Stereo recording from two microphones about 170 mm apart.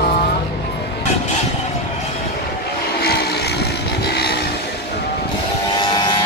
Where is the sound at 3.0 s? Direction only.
70° left (ahead or behind).